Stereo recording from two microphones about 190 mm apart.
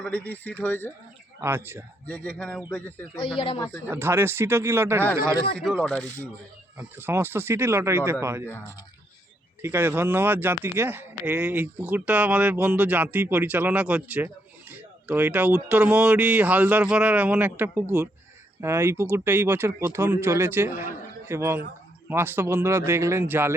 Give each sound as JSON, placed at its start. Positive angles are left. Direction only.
{"t": 0.0, "sound": "speech", "side_deg": 5}
{"t": 1.4, "sound": "speech", "side_deg": -10}
{"t": 2.0, "sound": "speech", "side_deg": 5}
{"t": 3.3, "sound": "speech", "side_deg": 25}
{"t": 3.8, "sound": "speech", "side_deg": -10}
{"t": 5.5, "sound": "speech", "side_deg": 5}
{"t": 6.7, "sound": "speech", "side_deg": -10}
{"t": 8.4, "sound": "speech", "side_deg": 10}
{"t": 9.6, "sound": "speech", "side_deg": -15}